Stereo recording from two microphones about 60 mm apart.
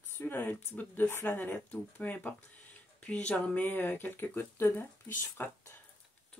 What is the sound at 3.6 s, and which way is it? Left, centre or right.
Speech, left.